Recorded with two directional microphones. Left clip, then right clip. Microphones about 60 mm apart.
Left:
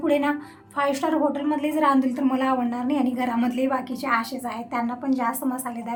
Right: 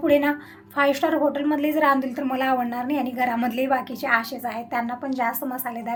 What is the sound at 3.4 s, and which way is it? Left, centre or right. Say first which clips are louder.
A woman's voice: right 2 dB; right.